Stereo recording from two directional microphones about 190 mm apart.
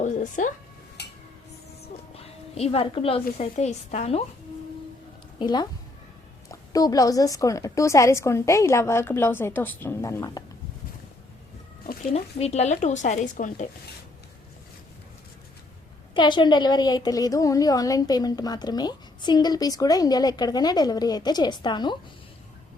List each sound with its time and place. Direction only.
0.0 s speech: 40° left (ahead or behind)
2.1 s a sound: 30° left (ahead or behind)
3.3 s speech: 35° left (ahead or behind)
5.4 s a woman's voice: 20° left (ahead or behind)
12.1 s speech: 35° left (ahead or behind)
16.1 s a woman's voice: 25° left (ahead or behind)